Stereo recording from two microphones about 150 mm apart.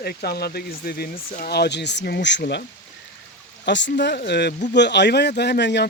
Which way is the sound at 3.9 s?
90° left.